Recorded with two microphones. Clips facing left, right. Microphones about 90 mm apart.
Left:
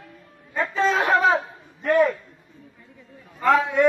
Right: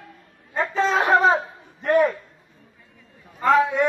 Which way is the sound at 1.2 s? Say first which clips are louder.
Right 1 dB; 35° right (ahead or behind).